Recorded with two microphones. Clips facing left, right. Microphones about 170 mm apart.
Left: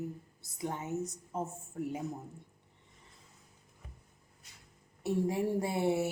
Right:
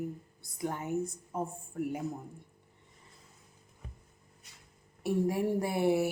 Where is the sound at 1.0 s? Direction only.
20° left (ahead or behind).